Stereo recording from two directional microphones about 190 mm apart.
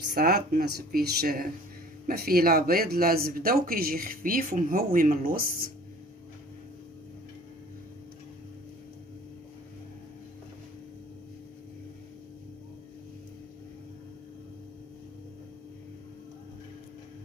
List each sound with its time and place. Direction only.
0.0 s speech: 55° right (ahead or behind)